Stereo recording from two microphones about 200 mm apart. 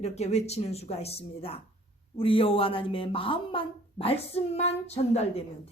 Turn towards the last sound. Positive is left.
turn(degrees=30)  # may be behind; listen again after turning